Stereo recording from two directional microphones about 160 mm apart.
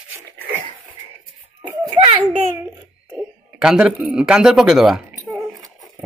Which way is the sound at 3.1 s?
5° right (ahead or behind).